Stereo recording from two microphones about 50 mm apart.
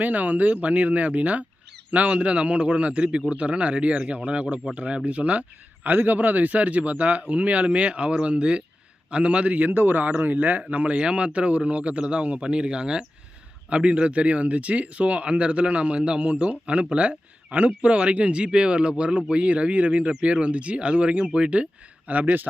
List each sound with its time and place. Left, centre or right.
0.0 s a man's voice: right